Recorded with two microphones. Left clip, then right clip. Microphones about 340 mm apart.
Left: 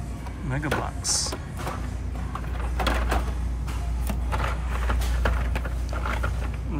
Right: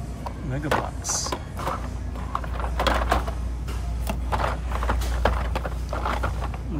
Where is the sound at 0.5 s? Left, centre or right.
Centre.